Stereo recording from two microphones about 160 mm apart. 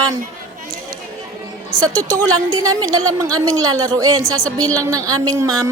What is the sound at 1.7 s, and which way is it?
A woman's voice, 20° right (ahead or behind).